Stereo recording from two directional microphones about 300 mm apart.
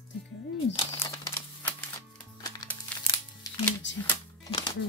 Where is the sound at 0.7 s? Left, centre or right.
Centre.